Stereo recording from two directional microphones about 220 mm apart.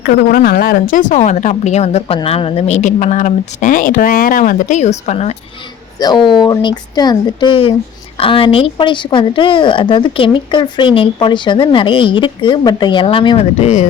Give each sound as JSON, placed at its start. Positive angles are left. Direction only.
{"t": 0.0, "sound": "a woman's voice", "side_deg": 45}